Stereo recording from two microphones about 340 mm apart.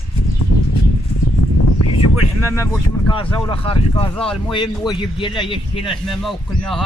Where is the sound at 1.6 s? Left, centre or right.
Left.